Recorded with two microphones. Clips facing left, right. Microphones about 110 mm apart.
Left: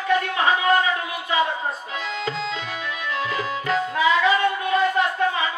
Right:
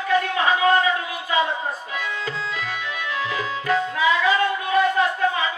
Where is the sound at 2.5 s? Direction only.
25° left (ahead or behind).